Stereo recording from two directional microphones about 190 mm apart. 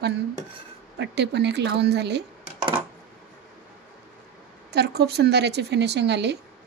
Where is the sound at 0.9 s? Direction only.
65° right (ahead or behind).